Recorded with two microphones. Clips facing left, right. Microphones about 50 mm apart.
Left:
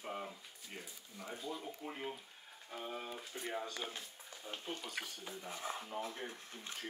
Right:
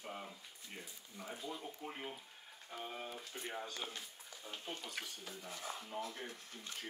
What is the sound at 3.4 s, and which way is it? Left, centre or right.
Speech, centre.